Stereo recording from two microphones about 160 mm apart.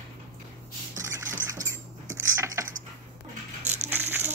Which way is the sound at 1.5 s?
20° right (ahead or behind).